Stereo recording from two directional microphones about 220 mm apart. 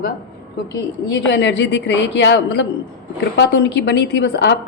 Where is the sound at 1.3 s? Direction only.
50° left (ahead or behind).